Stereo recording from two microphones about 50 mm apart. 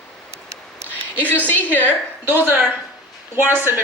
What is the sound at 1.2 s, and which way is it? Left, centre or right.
Music, left.